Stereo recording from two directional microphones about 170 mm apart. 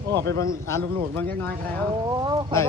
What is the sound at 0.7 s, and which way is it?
Speech, 15° left (ahead or behind).